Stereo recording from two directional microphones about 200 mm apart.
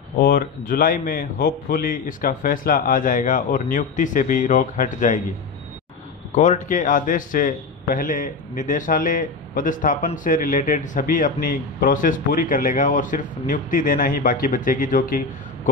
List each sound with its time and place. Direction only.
0.2 s a man's voice: 50° left (ahead or behind)
6.3 s a man's voice: 35° left (ahead or behind)